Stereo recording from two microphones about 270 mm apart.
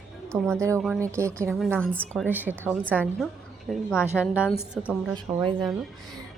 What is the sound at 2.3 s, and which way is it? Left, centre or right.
A woman's voice, centre.